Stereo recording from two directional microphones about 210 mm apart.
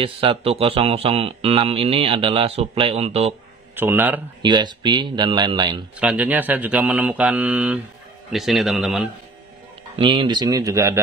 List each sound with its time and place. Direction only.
0.0 s a man's voice: 25° right (ahead or behind)
3.7 s speech: 10° right (ahead or behind)
4.4 s a man's voice: 20° right (ahead or behind)
5.9 s a man's voice: 5° right (ahead or behind)
9.9 s a man's voice: 25° right (ahead or behind)